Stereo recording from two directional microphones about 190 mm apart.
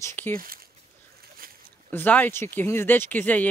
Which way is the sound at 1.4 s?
50° right (ahead or behind).